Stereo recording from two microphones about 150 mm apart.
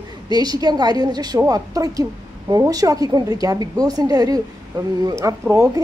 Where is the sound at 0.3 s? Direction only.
25° right (ahead or behind).